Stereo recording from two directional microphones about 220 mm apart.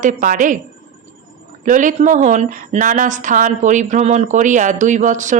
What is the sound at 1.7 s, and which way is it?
A woman's voice, 35° right (ahead or behind).